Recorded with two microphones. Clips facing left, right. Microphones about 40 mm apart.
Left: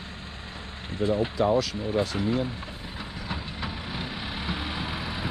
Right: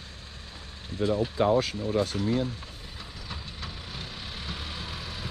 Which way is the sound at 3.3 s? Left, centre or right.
Left.